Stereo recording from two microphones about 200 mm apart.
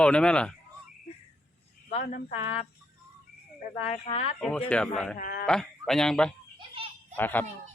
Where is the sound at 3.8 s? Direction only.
30° left (ahead or behind).